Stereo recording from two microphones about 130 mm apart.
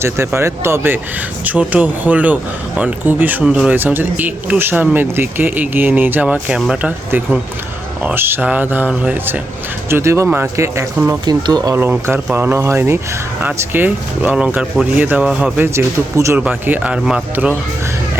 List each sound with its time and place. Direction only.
0.0 s speech: 20° right (ahead or behind)
11.3 s speech: 30° right (ahead or behind)
11.8 s speech: 15° right (ahead or behind)